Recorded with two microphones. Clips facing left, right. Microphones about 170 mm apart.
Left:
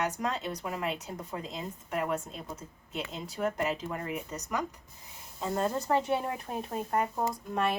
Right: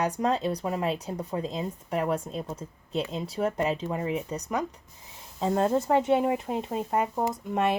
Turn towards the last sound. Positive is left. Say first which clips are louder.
# right 4 dB
turn(degrees=-20)  # may be behind; listen again after turning